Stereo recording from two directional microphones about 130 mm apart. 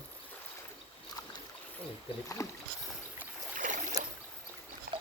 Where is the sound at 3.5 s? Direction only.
85° right.